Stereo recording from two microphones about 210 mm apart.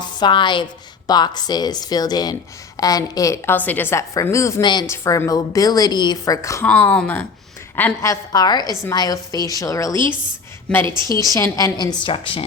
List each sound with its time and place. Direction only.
0.2 s a woman's voice: 20° left (ahead or behind)
9.9 s a woman's voice: 20° right (ahead or behind)
11.3 s a woman's voice: 15° left (ahead or behind)